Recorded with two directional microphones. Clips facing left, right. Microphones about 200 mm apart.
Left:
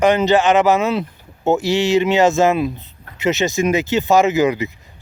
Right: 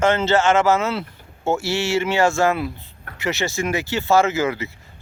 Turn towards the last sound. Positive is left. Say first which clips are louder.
# left 6 dB
turn(degrees=20)  # may be behind; listen again after turning